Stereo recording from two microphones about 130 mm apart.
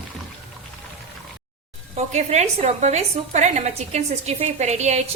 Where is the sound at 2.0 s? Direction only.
60° right (ahead or behind).